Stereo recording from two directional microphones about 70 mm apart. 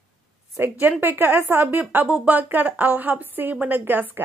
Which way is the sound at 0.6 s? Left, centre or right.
Right.